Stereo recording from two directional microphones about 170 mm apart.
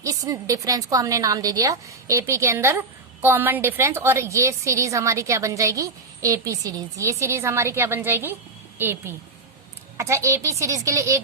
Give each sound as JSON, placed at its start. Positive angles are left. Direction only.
{"t": 0.0, "sound": "a woman's voice", "side_deg": -20}